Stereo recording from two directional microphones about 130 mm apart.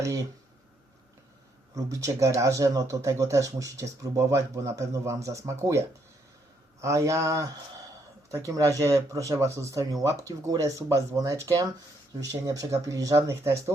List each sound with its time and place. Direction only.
1.7 s speech: 25° right (ahead or behind)
6.8 s speech: 25° right (ahead or behind)